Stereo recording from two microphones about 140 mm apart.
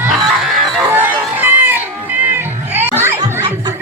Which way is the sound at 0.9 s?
15° right (ahead or behind).